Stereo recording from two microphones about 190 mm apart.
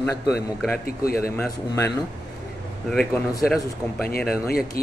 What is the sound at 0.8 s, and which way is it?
Speech, 50° left (ahead or behind).